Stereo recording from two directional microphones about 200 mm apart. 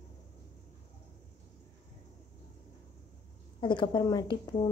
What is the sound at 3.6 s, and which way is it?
Speech, 25° left (ahead or behind).